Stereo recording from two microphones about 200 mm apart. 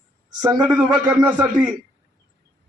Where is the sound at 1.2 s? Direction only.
5° right (ahead or behind).